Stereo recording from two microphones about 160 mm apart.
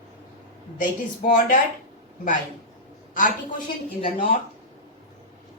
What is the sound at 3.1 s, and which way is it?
Speech, 55° left (ahead or behind).